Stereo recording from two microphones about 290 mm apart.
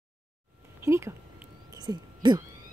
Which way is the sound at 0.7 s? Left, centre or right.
Centre.